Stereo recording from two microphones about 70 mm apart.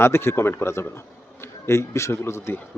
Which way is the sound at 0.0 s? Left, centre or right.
Left.